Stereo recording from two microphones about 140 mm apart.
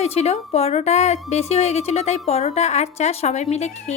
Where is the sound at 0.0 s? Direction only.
45° left (ahead or behind).